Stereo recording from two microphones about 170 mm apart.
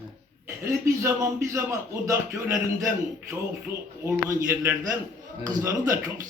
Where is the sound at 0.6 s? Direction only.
15° right (ahead or behind).